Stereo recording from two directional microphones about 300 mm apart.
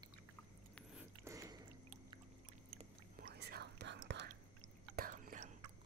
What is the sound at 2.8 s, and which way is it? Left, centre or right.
Whispering, right.